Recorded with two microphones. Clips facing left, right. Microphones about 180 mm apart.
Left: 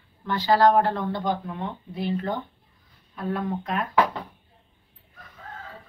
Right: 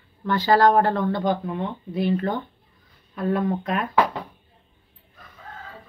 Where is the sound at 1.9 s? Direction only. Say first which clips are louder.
Right 5 dB; 65° right (ahead or behind).